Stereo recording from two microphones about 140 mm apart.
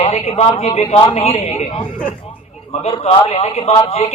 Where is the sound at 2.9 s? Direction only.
45° left (ahead or behind).